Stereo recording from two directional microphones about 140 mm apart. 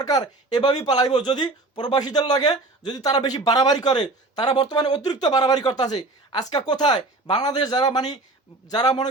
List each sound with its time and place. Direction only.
0.0 s speech: 30° left (ahead or behind)